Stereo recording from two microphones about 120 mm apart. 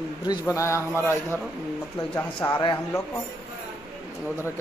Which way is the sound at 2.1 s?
15° left (ahead or behind).